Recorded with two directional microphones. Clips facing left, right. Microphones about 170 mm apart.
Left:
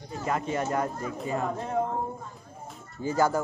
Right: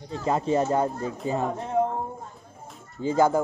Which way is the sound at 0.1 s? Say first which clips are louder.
Right 5 dB; 30° right (ahead or behind).